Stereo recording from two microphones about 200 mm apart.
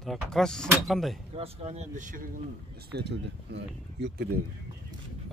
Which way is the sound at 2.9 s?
60° right (ahead or behind).